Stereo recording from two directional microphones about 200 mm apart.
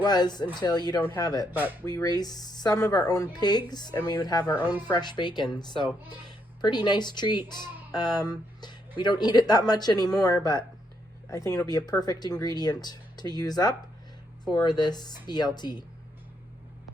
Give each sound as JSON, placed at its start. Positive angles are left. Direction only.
{"t": 0.0, "sound": "speech", "side_deg": 20}
{"t": 1.5, "sound": "speech", "side_deg": -10}
{"t": 1.8, "sound": "speech", "side_deg": 20}